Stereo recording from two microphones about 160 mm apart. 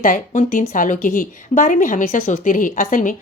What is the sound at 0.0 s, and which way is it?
A woman's voice, 55° left (ahead or behind).